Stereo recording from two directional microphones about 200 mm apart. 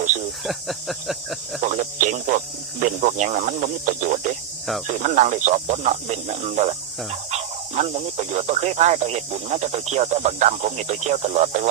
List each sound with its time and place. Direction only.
0.4 s speech: centre (ahead or behind)
1.6 s speech: 40° right (ahead or behind)